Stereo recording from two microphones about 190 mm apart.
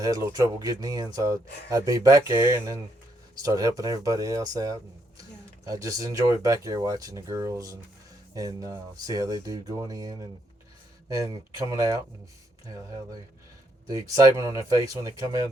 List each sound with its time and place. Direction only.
0.0 s speech: 15° right (ahead or behind)